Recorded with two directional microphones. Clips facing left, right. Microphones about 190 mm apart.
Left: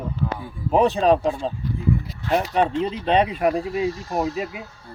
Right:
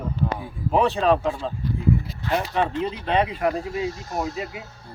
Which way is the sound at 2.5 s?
20° left (ahead or behind).